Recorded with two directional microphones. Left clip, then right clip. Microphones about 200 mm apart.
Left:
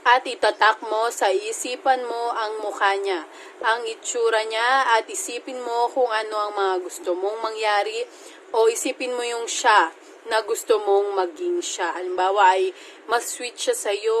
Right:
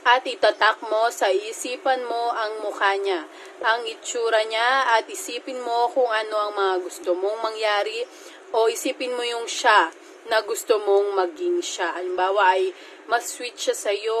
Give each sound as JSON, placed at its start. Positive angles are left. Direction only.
{"t": 0.0, "sound": "a woman's voice", "side_deg": 5}